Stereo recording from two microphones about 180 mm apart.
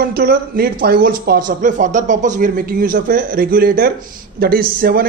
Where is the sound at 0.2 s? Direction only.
55° right (ahead or behind).